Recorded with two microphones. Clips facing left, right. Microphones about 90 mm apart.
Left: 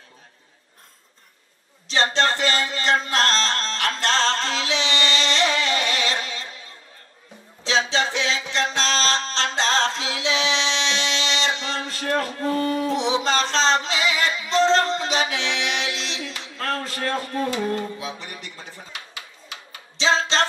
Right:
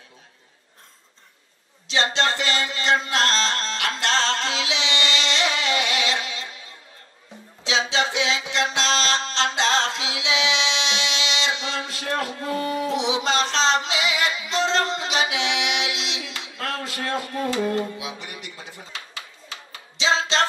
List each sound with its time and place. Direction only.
1.9 s music: 45° left (ahead or behind)
7.9 s music: 40° left (ahead or behind)
17.9 s a man's voice: 40° left (ahead or behind)
20.0 s music: 40° left (ahead or behind)